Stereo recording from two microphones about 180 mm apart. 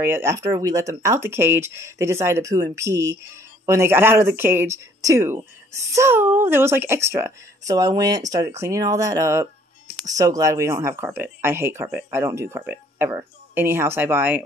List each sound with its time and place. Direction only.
0.0 s speech: 15° right (ahead or behind)